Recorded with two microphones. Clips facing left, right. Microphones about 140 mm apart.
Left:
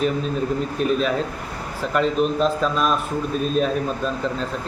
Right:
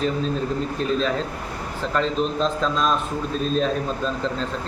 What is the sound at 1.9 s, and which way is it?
Speech, 10° left (ahead or behind).